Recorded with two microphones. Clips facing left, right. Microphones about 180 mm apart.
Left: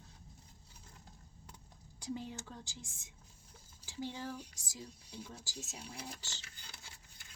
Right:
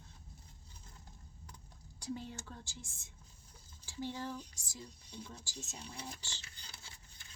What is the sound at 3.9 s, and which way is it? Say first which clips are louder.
Speech: right 1 dB; 15° left (ahead or behind).